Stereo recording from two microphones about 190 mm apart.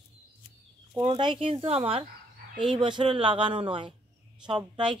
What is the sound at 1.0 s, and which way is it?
Speech, 25° right (ahead or behind).